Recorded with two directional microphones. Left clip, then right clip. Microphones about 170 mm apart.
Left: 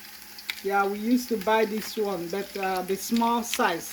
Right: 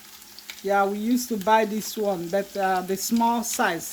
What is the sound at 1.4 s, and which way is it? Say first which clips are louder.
Speech: right 5 dB; 55° right (ahead or behind).